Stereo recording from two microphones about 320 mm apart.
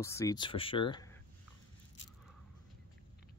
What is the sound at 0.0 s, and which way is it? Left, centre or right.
Speech, centre.